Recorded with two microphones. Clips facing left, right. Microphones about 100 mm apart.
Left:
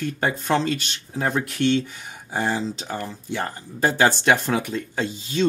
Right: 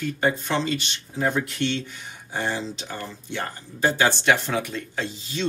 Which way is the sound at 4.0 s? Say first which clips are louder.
Left 3 dB; 45° left (ahead or behind).